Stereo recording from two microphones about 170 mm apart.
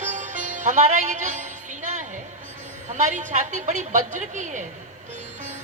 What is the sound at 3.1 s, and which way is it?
A man's voice, 45° right (ahead or behind).